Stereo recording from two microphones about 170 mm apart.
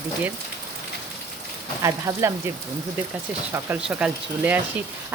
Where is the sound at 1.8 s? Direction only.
20° right (ahead or behind).